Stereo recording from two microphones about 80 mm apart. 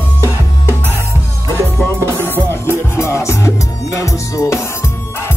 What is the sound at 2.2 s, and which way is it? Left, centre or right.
Music, left.